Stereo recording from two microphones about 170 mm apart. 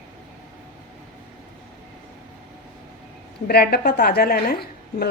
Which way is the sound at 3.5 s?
65° left (ahead or behind).